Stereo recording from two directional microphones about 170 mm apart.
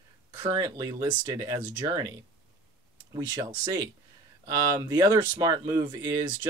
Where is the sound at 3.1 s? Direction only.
25° right (ahead or behind).